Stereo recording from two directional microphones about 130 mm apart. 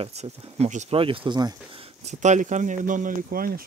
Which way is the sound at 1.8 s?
65° right (ahead or behind).